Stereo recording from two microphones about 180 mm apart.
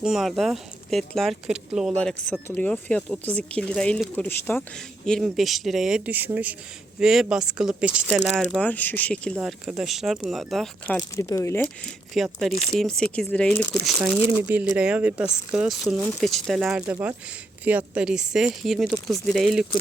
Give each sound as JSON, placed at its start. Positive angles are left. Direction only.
{"t": 0.0, "sound": "speech", "side_deg": 0}
{"t": 11.1, "sound": "speech", "side_deg": 15}
{"t": 12.1, "sound": "speech", "side_deg": 0}
{"t": 14.4, "sound": "speech", "side_deg": -10}